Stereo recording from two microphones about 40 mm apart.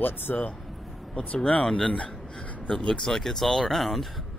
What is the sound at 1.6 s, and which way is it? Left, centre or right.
Speech, left.